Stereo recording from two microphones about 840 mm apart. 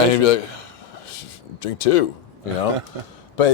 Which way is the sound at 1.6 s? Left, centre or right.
Left.